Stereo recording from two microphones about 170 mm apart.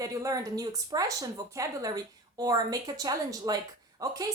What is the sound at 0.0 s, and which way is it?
A woman's voice, 20° right (ahead or behind).